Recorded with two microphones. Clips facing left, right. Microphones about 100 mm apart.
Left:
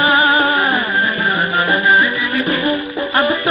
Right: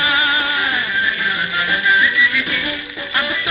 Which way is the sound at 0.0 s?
35° left (ahead or behind).